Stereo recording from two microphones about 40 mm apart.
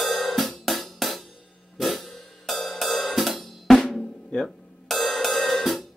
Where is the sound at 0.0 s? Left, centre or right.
Centre.